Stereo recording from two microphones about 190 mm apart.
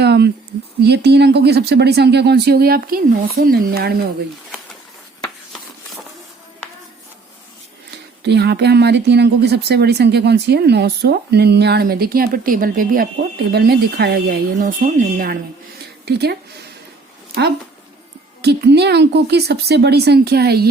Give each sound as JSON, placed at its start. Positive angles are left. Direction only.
{"t": 0.0, "sound": "a sound", "side_deg": -60}
{"t": 0.8, "sound": "speech", "side_deg": -60}
{"t": 7.9, "sound": "speech", "side_deg": -60}
{"t": 14.6, "sound": "speech", "side_deg": -45}
{"t": 18.4, "sound": "speech", "side_deg": -60}